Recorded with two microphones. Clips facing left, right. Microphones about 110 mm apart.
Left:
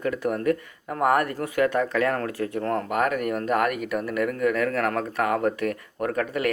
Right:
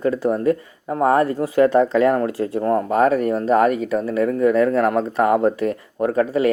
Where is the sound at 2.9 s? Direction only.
30° right (ahead or behind).